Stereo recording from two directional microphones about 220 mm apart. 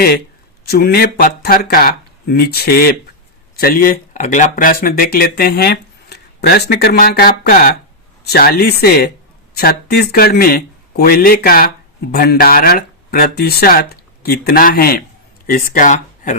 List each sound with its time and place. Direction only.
0.7 s speech: 45° left (ahead or behind)